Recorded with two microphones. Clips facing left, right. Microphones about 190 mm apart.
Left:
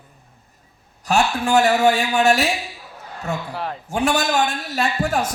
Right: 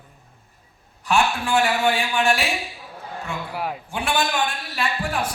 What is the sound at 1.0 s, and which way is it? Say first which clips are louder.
A woman's voice: left 2 dB; 40° left (ahead or behind).